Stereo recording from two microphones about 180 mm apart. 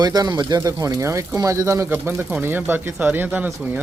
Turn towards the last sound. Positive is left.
turn(degrees=-10)  # may be behind; listen again after turning